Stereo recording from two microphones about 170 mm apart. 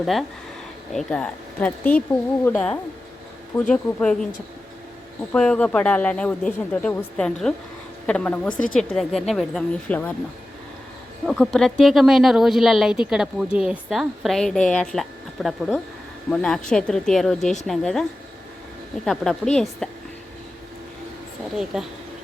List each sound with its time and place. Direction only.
0.0 s speech: centre (ahead or behind)
5.3 s speech: 5° left (ahead or behind)
11.3 s speech: centre (ahead or behind)
19.0 s speech: centre (ahead or behind)
21.5 s speech: centre (ahead or behind)